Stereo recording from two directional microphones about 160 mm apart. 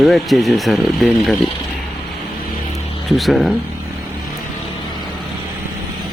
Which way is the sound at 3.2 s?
Centre (ahead or behind).